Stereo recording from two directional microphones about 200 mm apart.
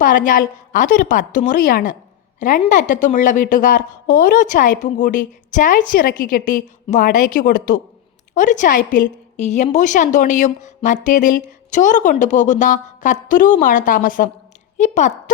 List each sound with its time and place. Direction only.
0.0 s a woman's voice: 40° left (ahead or behind)